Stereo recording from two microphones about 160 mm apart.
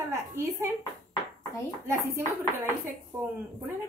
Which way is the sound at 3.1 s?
15° right (ahead or behind).